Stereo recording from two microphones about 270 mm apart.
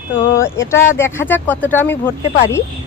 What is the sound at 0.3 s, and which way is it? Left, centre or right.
Speech, centre.